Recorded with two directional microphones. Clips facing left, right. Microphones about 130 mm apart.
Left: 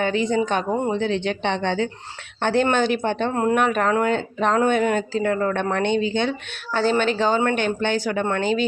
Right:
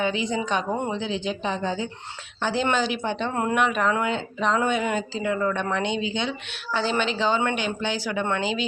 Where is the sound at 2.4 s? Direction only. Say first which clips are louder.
Left 5 dB; 55° left (ahead or behind).